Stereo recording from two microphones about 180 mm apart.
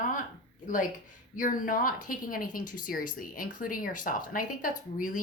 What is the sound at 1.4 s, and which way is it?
Speech, 50° left (ahead or behind).